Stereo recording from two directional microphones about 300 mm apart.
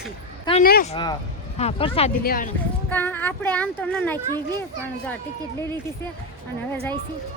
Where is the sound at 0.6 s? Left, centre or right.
Left.